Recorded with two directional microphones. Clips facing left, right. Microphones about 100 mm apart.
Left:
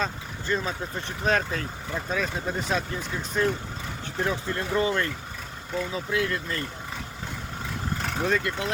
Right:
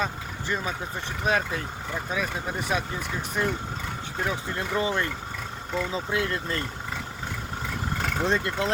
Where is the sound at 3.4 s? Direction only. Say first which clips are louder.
Left 3 dB; 10° right (ahead or behind); by 6.6 s 30° right (ahead or behind).